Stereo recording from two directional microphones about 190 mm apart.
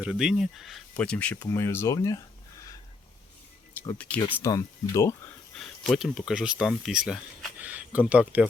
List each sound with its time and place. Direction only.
0.0 s speech: 5° right (ahead or behind); by 2.6 s 15° left (ahead or behind)
3.8 s speech: 10° left (ahead or behind)
5.5 s speech: centre (ahead or behind)